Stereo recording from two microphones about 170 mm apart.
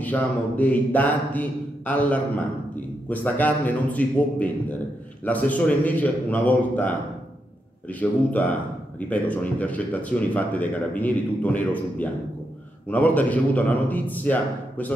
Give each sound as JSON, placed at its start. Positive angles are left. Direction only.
{"t": 0.0, "sound": "speech", "side_deg": 10}